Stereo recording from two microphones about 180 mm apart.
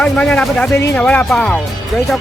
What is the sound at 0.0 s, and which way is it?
Speech, 5° left (ahead or behind).